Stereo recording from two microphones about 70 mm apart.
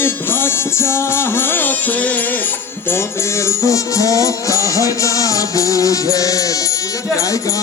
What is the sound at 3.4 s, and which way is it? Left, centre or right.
Music, left.